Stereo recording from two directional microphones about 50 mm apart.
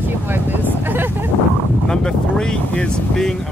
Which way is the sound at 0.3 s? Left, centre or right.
Right.